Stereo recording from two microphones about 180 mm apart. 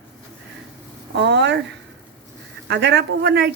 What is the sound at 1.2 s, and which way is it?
Speech, 75° right (ahead or behind).